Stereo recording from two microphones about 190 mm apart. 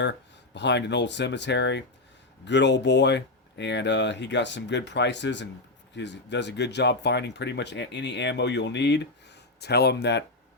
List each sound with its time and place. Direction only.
0.0 s speech: 65° left (ahead or behind)